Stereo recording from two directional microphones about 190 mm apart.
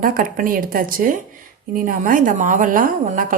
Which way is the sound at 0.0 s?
45° right (ahead or behind).